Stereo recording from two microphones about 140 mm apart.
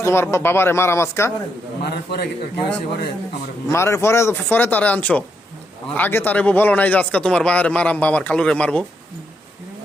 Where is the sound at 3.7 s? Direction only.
20° left (ahead or behind).